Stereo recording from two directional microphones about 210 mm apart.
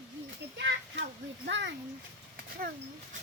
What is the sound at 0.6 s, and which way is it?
Child singing, 55° right (ahead or behind).